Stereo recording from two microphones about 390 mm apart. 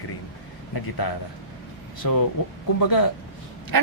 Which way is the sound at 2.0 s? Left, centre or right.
Left.